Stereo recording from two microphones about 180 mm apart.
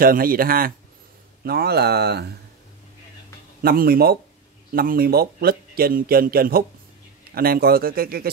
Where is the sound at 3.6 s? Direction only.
55° right (ahead or behind).